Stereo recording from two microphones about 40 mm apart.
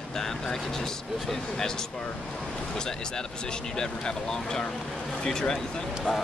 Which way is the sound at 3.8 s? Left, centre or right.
Centre.